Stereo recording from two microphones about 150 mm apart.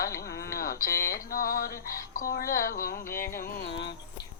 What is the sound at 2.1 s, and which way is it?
Speech, 80° left.